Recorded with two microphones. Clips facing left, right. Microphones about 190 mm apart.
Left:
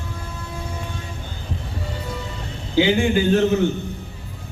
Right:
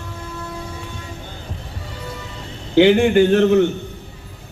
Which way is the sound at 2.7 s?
65° right (ahead or behind).